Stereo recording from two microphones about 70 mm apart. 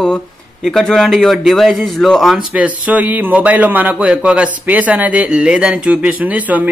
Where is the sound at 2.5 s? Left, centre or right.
Right.